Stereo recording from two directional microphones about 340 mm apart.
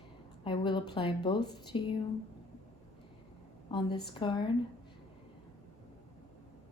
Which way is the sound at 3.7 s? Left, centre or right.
Centre.